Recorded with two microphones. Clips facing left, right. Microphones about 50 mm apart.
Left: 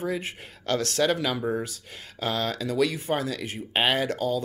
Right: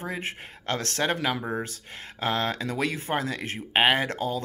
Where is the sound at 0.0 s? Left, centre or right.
Right.